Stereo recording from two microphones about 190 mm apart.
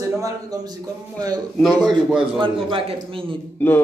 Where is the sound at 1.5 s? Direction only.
5° left (ahead or behind).